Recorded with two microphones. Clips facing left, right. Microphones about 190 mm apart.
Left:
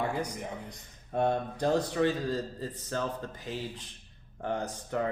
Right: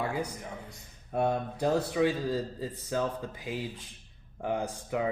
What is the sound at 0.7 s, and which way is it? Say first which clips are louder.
Speech: even; 5° right (ahead or behind).